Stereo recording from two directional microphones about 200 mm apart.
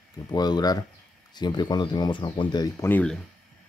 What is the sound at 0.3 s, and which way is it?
Speech, 20° left (ahead or behind).